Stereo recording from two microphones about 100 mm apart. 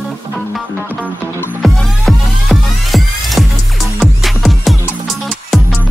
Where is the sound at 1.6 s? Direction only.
Centre (ahead or behind).